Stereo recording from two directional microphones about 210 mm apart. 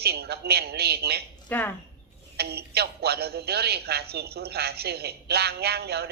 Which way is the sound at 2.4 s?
50° right (ahead or behind).